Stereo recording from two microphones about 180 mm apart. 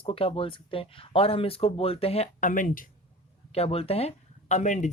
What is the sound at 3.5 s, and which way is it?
Speech, 35° left (ahead or behind).